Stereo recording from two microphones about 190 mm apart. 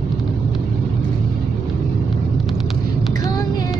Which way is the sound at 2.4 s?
Centre (ahead or behind).